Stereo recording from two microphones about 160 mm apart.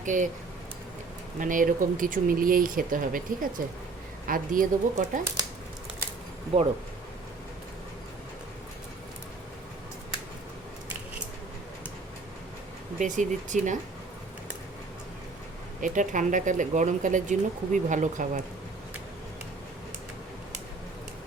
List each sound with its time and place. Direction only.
0.0 s speech: 55° right (ahead or behind)
1.4 s speech: 55° right (ahead or behind)
6.5 s speech: 35° right (ahead or behind)
13.0 s speech: 50° right (ahead or behind)
15.8 s speech: 55° right (ahead or behind)